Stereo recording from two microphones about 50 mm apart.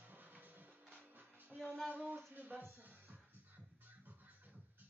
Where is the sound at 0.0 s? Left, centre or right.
Right.